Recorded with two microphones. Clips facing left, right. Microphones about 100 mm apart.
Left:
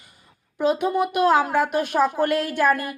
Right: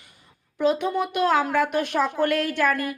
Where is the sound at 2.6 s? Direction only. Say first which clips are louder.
Left 5 dB; 40° left (ahead or behind).